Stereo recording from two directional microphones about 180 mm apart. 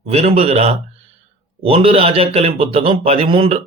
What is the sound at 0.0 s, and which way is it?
A man's voice, 35° right (ahead or behind).